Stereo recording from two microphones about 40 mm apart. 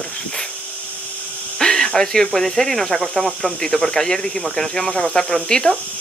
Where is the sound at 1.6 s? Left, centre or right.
Centre.